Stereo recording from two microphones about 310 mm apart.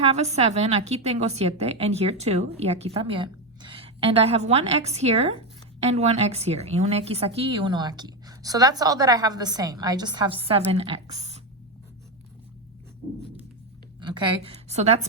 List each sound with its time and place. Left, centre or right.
0.1 s a woman's voice: right
14.0 s a woman's voice: centre